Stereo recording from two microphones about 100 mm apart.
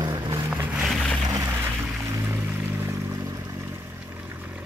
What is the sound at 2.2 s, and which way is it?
Vehicle, 20° right (ahead or behind).